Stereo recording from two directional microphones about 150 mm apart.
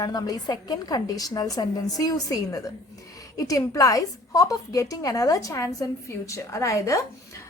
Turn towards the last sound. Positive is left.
turn(degrees=20)  # may be behind; listen again after turning